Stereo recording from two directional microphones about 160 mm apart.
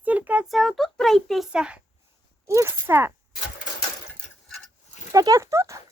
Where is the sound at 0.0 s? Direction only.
10° right (ahead or behind).